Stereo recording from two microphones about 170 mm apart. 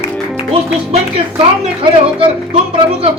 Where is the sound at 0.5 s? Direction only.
35° right (ahead or behind).